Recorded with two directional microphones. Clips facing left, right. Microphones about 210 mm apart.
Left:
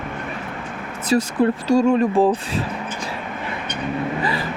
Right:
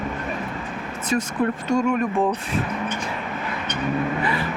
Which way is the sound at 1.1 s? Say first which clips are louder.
Left 5 dB; 35° left (ahead or behind).